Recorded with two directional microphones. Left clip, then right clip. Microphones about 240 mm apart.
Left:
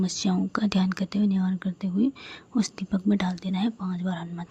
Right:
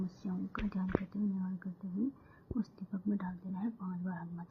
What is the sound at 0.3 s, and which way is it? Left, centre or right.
Speech, left.